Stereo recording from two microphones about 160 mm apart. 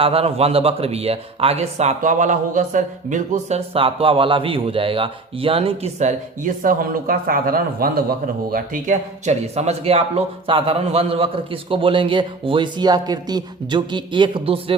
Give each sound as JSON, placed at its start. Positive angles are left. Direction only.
{"t": 0.0, "sound": "a man's voice", "side_deg": -40}